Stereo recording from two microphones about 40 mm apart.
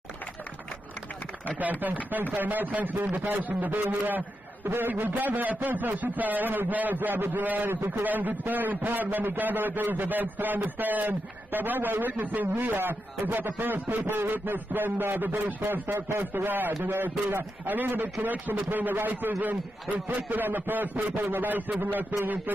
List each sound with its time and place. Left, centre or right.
1.6 s a man's voice: right
16.4 s a man's voice: right